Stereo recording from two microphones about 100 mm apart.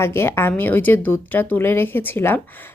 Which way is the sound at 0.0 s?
25° left (ahead or behind).